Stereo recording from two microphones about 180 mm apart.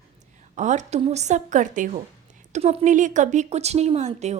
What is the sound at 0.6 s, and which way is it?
A woman's voice, 40° right (ahead or behind).